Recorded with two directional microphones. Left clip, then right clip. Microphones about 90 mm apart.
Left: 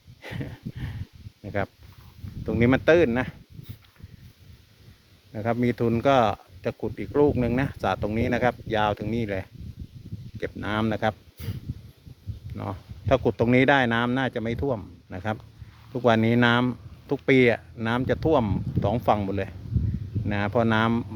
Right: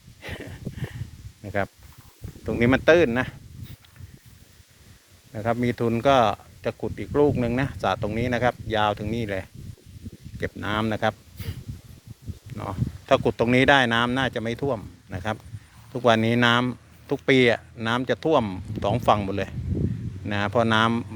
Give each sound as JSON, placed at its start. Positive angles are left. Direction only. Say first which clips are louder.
{"t": 0.2, "sound": "a sound", "louder": "right 1 dB", "side_deg": 25}
{"t": 1.4, "sound": "speech", "louder": "right 2 dB", "side_deg": 10}
{"t": 5.3, "sound": "speech", "louder": "right 1 dB", "side_deg": 30}
{"t": 12.5, "sound": "speech", "louder": "right 2 dB", "side_deg": 25}